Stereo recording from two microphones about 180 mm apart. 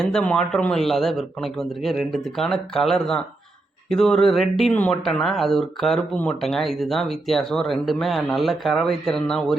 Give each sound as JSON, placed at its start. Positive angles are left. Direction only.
{"t": 0.0, "sound": "speech", "side_deg": 5}